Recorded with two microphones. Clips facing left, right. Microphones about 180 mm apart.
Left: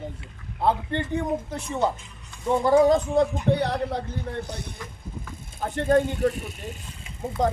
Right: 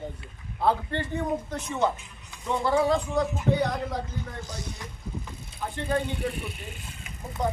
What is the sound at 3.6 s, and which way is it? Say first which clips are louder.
Speech: left 2 dB; 35° left (ahead or behind).